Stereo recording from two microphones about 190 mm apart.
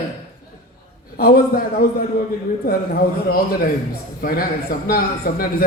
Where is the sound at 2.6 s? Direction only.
50° left (ahead or behind).